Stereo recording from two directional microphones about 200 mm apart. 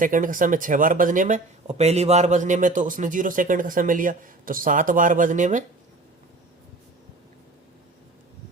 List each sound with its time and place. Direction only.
0.0 s speech: 40° right (ahead or behind)